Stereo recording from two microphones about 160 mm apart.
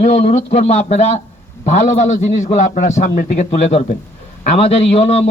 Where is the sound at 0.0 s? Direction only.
45° left (ahead or behind).